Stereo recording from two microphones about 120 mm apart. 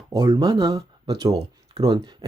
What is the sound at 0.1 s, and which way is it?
Speech, 25° right (ahead or behind).